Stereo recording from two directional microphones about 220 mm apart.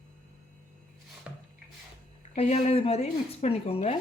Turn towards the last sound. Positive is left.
turn(degrees=25)  # may be behind; listen again after turning